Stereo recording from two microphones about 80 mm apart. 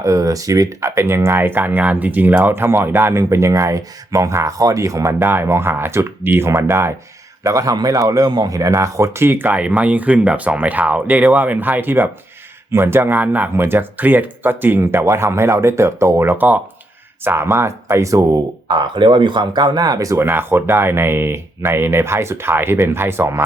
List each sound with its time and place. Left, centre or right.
0.0 s speech: right
5.2 s speech: right
7.4 s a man's voice: right
16.3 s a man's voice: right
18.7 s speech: right
20.2 s speech: right